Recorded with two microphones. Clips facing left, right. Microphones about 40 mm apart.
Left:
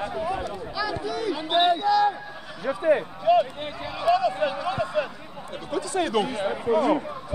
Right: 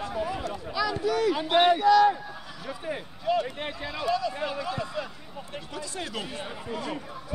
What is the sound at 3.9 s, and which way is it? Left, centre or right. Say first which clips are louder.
Speech: left 7 dB; left.